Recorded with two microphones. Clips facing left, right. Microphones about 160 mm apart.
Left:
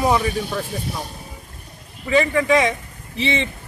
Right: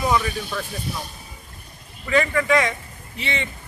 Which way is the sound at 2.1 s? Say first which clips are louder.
Left 3 dB; 20° left (ahead or behind).